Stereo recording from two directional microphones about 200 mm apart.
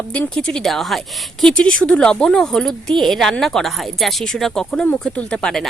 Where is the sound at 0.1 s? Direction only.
5° left (ahead or behind).